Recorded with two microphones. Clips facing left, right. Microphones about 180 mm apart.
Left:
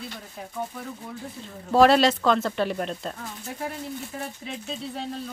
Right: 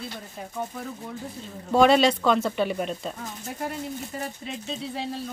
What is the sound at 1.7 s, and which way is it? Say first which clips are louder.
Speech: left 1 dB; centre (ahead or behind).